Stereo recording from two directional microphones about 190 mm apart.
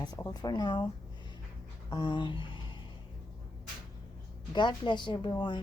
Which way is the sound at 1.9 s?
25° left (ahead or behind).